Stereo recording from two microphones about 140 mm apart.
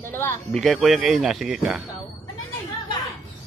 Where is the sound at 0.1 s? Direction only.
15° left (ahead or behind).